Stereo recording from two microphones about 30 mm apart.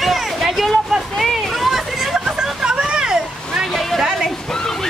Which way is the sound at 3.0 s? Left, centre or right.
Right.